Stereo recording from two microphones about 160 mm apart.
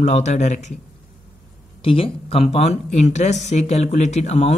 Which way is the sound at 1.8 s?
35° left (ahead or behind).